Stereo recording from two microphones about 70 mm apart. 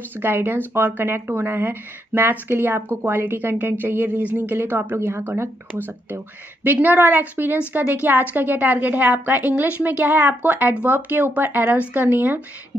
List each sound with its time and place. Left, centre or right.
0.2 s speech: right